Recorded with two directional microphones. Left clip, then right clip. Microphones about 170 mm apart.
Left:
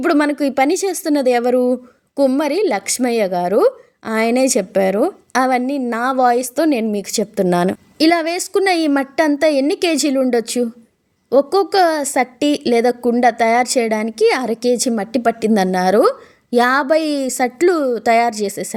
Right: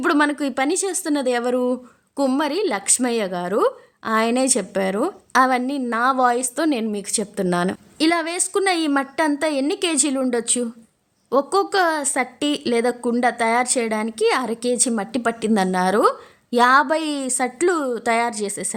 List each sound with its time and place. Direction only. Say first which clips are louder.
0.0 s a woman's voice: left 3 dB; 15° left (ahead or behind)